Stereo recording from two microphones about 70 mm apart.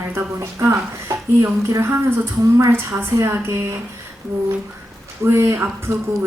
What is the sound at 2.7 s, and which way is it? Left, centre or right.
A woman's voice, right.